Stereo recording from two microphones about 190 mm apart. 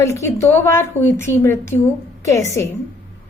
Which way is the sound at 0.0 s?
15° left (ahead or behind).